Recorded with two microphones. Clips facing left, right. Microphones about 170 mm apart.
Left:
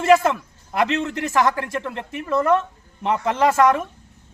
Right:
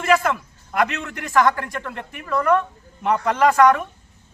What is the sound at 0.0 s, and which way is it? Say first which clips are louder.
A man's voice: left 3 dB; 25° left (ahead or behind).